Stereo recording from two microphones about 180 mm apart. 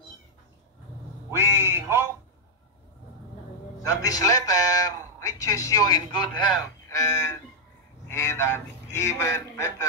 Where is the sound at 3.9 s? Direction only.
20° left (ahead or behind).